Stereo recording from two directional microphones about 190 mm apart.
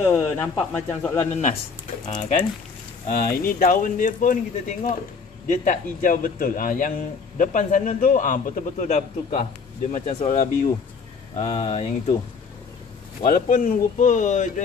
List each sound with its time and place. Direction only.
0.0 s speech: 5° left (ahead or behind)
1.3 s speech: 35° left (ahead or behind)
3.1 s a man's voice: 50° left (ahead or behind)
13.2 s a man's voice: 45° left (ahead or behind)